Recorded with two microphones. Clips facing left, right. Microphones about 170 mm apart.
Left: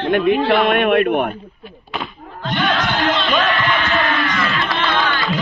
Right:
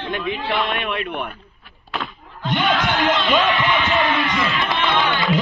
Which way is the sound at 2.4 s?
15° right (ahead or behind).